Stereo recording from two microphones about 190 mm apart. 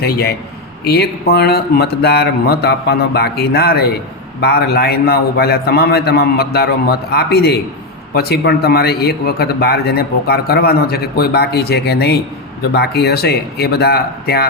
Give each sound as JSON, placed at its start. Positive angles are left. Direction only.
{"t": 0.0, "sound": "a man's voice", "side_deg": 55}